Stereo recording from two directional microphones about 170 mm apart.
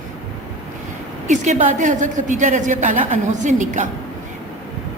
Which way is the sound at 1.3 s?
45° right (ahead or behind).